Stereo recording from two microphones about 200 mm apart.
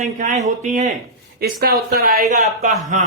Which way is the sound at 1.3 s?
50° right (ahead or behind).